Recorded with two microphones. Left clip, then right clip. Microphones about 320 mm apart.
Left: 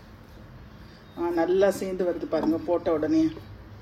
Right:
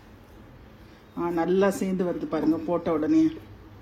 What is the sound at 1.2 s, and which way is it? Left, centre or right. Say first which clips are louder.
Speech: left 1 dB; centre.